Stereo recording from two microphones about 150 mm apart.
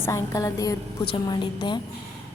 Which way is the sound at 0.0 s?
20° left (ahead or behind).